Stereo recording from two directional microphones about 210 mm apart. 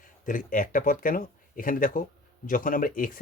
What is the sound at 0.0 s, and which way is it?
Speech, 40° left (ahead or behind).